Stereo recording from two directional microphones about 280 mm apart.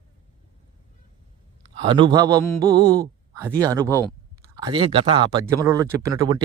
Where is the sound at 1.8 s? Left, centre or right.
Centre.